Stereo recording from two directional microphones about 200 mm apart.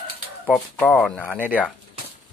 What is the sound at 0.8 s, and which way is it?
Speech, 5° left (ahead or behind).